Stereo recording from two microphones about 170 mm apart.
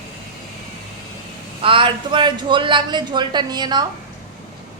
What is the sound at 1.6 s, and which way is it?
A man's voice, 30° right (ahead or behind).